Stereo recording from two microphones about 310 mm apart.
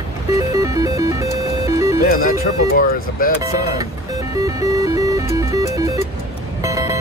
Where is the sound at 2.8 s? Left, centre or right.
Left.